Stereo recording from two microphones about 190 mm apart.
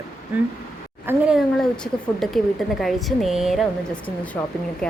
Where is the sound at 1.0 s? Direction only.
5° right (ahead or behind).